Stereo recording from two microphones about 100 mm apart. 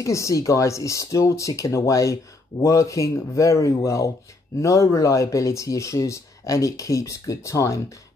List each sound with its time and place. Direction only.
0.0 s speech: 30° left (ahead or behind)